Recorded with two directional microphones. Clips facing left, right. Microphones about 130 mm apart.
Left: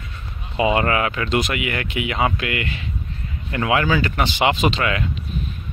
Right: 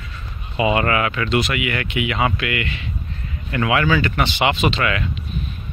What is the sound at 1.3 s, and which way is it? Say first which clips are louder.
Speech: right 1 dB; 45° left (ahead or behind).